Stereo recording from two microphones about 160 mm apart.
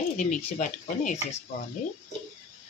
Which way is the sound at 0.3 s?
50° left (ahead or behind).